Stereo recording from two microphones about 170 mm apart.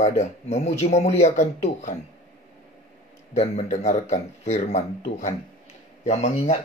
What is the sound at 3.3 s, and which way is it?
A man's voice, 40° left (ahead or behind).